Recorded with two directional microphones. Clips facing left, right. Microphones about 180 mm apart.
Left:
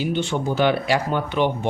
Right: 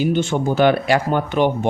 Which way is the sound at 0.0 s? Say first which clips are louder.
Right 4 dB; 45° right (ahead or behind).